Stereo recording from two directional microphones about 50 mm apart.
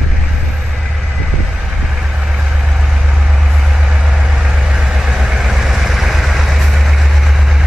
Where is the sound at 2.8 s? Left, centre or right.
Centre.